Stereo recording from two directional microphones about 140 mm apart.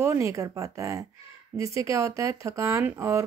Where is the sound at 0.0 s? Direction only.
20° right (ahead or behind).